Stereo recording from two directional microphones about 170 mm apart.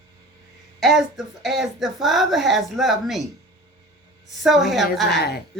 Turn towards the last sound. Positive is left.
turn(degrees=70)  # may be behind; listen again after turning